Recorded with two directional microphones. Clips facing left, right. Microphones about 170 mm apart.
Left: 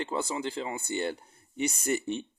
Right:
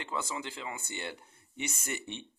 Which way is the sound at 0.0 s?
35° left (ahead or behind).